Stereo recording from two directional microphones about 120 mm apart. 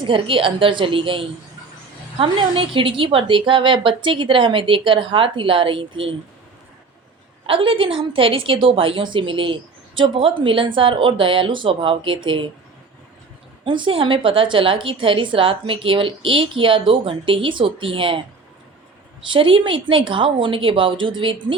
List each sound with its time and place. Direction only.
0.0 s a woman's voice: 45° right (ahead or behind)
7.4 s a woman's voice: 50° right (ahead or behind)
13.7 s a woman's voice: 45° right (ahead or behind)
19.3 s a woman's voice: 50° right (ahead or behind)